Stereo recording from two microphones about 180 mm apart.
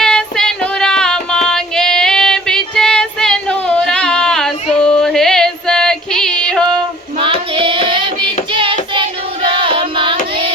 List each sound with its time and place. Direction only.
0.0 s music: 5° left (ahead or behind)
7.2 s child singing: 30° right (ahead or behind)